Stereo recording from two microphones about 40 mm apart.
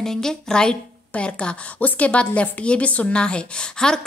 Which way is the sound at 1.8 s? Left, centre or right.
Left.